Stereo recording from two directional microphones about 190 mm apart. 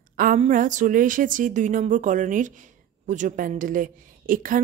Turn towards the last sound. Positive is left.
turn(degrees=-45)  # may be behind; listen again after turning